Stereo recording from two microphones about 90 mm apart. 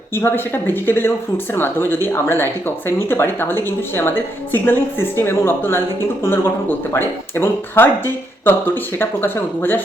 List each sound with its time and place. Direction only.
0.1 s speech: 25° left (ahead or behind)